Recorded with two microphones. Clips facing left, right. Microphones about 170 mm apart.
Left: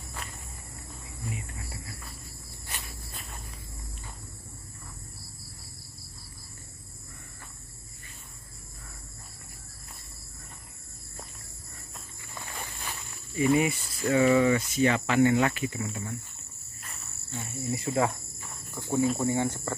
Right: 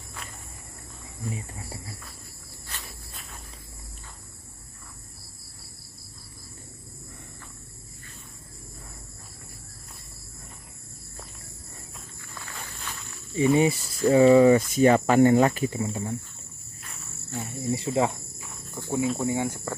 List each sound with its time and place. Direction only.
1.3 s speech: 35° right (ahead or behind)
12.4 s walk: 15° left (ahead or behind)
13.4 s cricket: 30° right (ahead or behind)
16.8 s cricket: centre (ahead or behind)
17.3 s speech: 20° right (ahead or behind)
18.8 s speech: 15° right (ahead or behind)